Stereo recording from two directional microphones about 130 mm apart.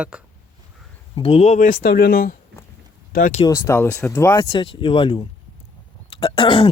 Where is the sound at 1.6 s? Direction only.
90° left.